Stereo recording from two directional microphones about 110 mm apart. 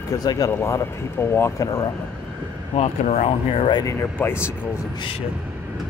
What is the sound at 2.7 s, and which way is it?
Speech, 80° left.